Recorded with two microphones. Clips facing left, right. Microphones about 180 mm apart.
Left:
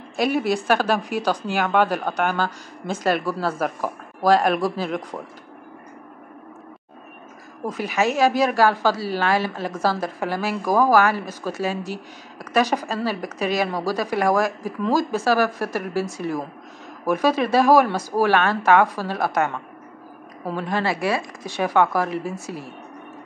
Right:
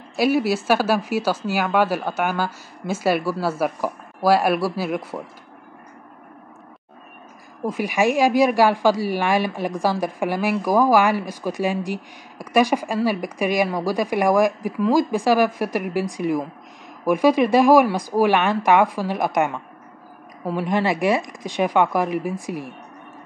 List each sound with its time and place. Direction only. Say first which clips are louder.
0.1 s speech: right 2 dB; 5° right (ahead or behind)
7.6 s speech: right 2 dB; 10° right (ahead or behind)